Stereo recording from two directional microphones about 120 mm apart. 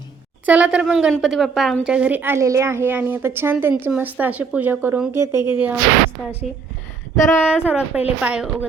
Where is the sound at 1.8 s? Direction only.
10° right (ahead or behind).